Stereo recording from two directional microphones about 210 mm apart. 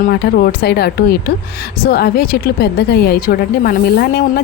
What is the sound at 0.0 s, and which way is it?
Speech, 45° left (ahead or behind).